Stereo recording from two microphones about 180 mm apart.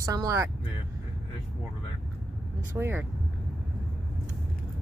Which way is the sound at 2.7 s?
15° right (ahead or behind).